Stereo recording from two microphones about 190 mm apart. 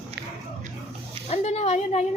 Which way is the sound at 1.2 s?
35° left (ahead or behind).